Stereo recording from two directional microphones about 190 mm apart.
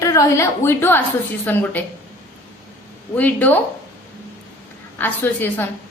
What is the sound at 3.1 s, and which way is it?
Speech, 10° left (ahead or behind).